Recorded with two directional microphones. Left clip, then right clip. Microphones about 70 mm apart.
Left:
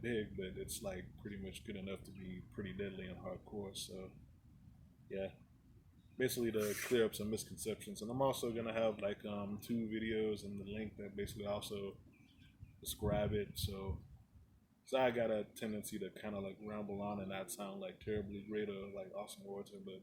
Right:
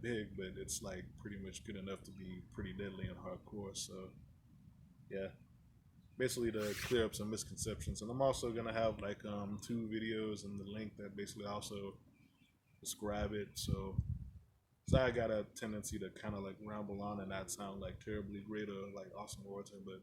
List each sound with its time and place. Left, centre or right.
0.0 s speech: right
5.0 s speech: right
14.8 s speech: right